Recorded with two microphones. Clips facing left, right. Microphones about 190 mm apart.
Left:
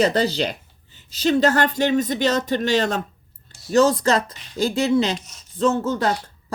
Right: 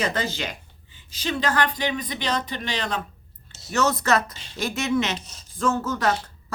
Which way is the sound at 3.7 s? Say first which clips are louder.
Left 5 dB; 30° left (ahead or behind).